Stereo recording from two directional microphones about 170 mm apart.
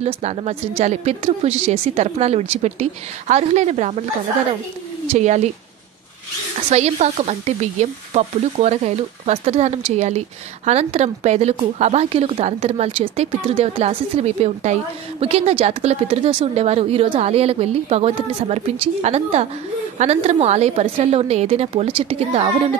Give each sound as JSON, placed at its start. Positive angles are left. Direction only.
{"t": 0.0, "sound": "a woman's voice", "side_deg": -40}
{"t": 6.7, "sound": "a woman's voice", "side_deg": -40}